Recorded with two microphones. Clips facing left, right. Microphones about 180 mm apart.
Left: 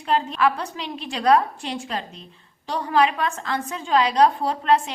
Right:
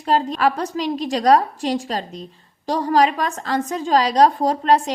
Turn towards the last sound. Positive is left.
turn(degrees=-40)  # may be behind; listen again after turning